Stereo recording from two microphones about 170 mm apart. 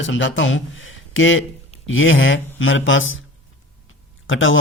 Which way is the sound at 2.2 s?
90° left.